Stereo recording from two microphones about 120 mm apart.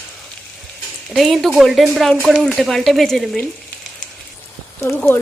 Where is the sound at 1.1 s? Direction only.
Centre (ahead or behind).